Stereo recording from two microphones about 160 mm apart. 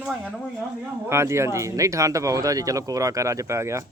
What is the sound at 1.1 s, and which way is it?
Speech, 15° right (ahead or behind).